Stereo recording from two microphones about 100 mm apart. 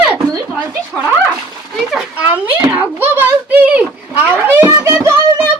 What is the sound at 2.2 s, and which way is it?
Speech, 15° right (ahead or behind).